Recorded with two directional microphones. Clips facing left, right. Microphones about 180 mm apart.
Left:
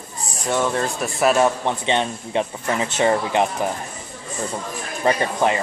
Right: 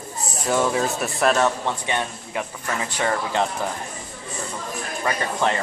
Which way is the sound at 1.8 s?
25° left (ahead or behind).